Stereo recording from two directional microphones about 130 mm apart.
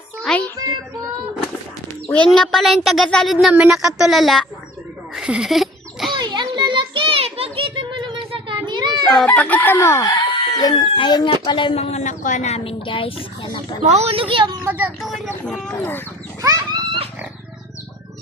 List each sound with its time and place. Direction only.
0.2 s music: 10° left (ahead or behind)
2.0 s speech: 10° left (ahead or behind)
3.5 s speech: 5° right (ahead or behind)
5.1 s a sound: 5° right (ahead or behind)
6.1 s a sound: 35° right (ahead or behind)
9.2 s chicken: 15° left (ahead or behind)
10.6 s speech: 30° left (ahead or behind)
11.8 s speech: 60° left (ahead or behind); by 13.7 s 40° left (ahead or behind)
13.8 s speech: 55° right (ahead or behind); by 14.6 s 40° right (ahead or behind)
14.6 s speech: 15° right (ahead or behind)
16.4 s wild animals: 30° right (ahead or behind)